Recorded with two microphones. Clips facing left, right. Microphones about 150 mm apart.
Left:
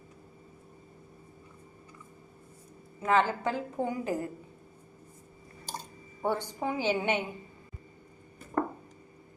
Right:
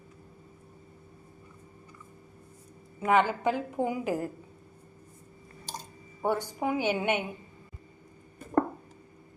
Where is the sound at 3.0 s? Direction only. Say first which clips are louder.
Right 2 dB; 15° right (ahead or behind).